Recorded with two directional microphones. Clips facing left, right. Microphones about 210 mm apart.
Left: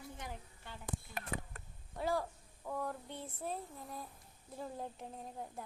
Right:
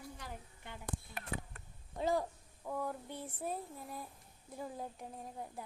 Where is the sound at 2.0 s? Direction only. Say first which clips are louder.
Right 2 dB; 20° right (ahead or behind).